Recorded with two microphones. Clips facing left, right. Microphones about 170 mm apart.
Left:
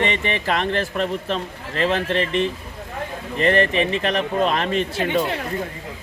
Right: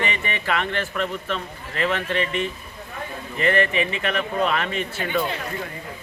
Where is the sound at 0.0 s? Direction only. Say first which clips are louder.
Left 5 dB; 30° left (ahead or behind).